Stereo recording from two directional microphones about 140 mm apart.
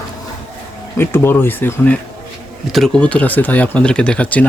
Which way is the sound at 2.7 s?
5° left (ahead or behind).